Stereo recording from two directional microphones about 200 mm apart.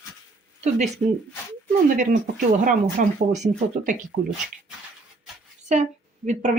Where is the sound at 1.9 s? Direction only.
40° right (ahead or behind).